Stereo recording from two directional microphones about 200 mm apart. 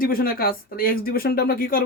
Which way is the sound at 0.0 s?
45° left (ahead or behind).